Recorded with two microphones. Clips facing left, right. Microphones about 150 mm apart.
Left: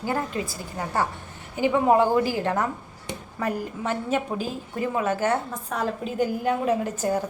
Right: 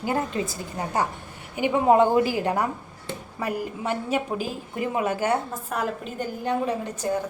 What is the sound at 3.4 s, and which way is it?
A woman's voice, 10° right (ahead or behind).